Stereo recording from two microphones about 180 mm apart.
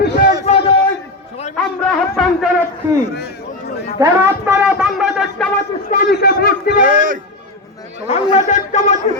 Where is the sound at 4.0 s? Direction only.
20° right (ahead or behind).